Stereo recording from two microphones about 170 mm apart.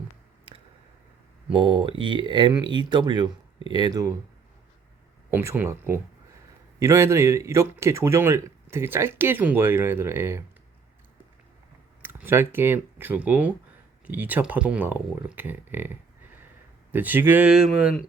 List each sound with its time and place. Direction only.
1.5 s speech: 30° right (ahead or behind)
5.3 s speech: 15° right (ahead or behind)
12.0 s speech: 15° right (ahead or behind)